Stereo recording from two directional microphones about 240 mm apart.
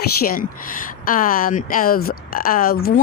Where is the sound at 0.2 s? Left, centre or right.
Left.